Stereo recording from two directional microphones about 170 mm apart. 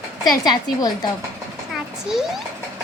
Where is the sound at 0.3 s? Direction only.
25° left (ahead or behind).